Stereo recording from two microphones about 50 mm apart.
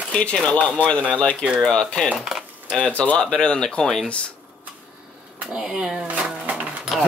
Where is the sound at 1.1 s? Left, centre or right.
Left.